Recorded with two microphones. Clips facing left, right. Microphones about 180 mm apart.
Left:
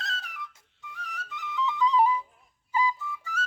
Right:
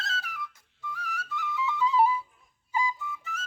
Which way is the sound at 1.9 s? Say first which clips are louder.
Even; 5° right (ahead or behind).